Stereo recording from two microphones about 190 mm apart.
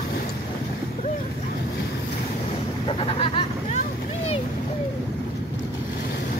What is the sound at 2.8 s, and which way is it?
Vehicle, 30° left (ahead or behind).